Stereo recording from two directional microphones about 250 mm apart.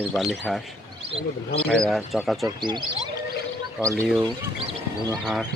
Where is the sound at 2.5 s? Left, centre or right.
Centre.